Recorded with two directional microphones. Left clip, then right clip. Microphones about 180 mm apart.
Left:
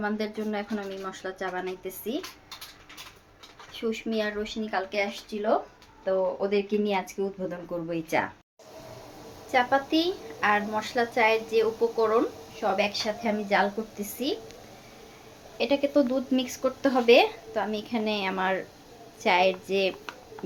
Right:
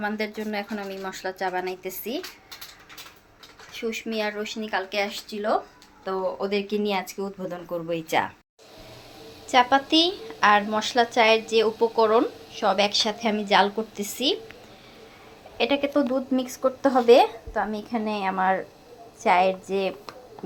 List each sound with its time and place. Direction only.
0.0 s speech: centre (ahead or behind)
3.7 s speech: 5° left (ahead or behind)
9.5 s a woman's voice: 25° right (ahead or behind)
15.5 s speech: 10° right (ahead or behind)